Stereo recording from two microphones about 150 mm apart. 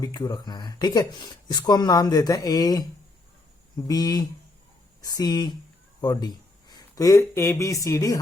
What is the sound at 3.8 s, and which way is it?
Speech, 25° left (ahead or behind).